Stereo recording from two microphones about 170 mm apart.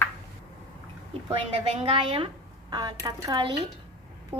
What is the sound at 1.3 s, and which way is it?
A woman's voice, 35° right (ahead or behind).